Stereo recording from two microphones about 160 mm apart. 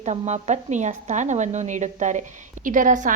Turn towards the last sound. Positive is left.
turn(degrees=-55)  # may be behind; listen again after turning